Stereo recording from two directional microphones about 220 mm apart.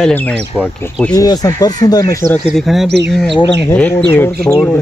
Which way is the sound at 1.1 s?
15° left (ahead or behind).